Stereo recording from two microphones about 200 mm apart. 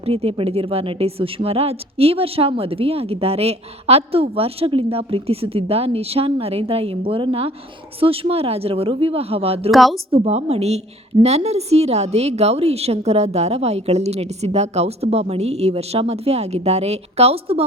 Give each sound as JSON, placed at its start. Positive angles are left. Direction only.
{"t": 0.0, "sound": "a woman's voice", "side_deg": -30}
{"t": 9.7, "sound": "speech", "side_deg": 0}
{"t": 10.1, "sound": "a woman's voice", "side_deg": -30}